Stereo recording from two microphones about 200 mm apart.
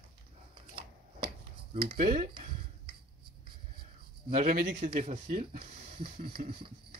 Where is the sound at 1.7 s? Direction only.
50° right (ahead or behind).